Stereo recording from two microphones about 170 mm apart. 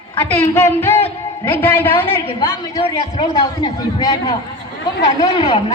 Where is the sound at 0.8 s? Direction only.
10° left (ahead or behind).